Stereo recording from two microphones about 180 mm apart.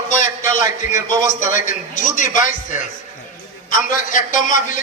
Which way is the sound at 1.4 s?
45° left (ahead or behind).